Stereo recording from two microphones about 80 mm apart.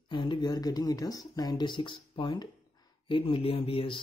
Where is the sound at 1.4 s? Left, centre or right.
Left.